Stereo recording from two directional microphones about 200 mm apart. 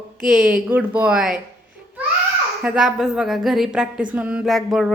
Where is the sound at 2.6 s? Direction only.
5° right (ahead or behind).